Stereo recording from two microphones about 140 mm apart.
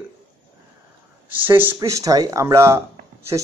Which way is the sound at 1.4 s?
15° right (ahead or behind).